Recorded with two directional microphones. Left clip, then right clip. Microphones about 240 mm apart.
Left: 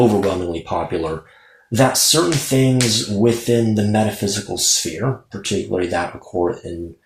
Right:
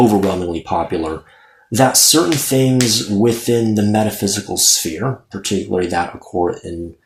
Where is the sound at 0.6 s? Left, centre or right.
Right.